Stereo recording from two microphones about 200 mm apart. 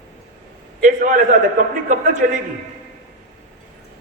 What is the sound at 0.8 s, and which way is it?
A man's voice, 40° right (ahead or behind).